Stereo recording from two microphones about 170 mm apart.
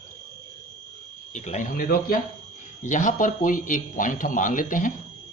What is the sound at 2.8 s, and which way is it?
Speech, 45° left (ahead or behind).